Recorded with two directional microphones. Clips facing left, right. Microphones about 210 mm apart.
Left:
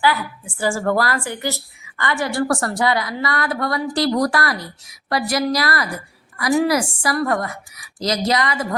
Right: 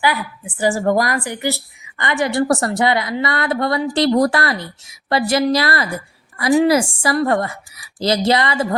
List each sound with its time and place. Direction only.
0.0 s a woman's voice: 15° right (ahead or behind)